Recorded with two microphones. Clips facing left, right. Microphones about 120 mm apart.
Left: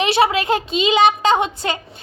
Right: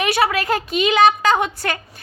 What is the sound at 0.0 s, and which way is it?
Speech, 25° left (ahead or behind).